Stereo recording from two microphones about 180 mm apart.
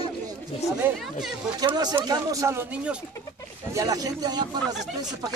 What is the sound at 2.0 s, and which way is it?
Speech, 20° right (ahead or behind).